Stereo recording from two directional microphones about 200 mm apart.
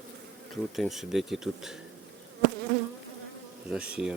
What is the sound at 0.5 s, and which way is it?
Speech, centre (ahead or behind).